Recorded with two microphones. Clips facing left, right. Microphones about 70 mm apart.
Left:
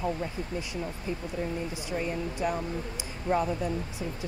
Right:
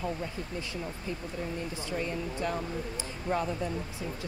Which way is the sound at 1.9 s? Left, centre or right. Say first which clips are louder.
Left 2 dB; centre.